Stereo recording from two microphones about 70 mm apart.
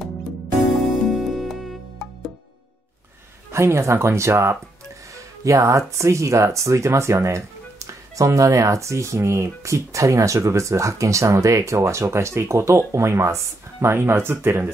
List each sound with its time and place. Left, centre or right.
1.1 s music: centre
3.5 s speech: right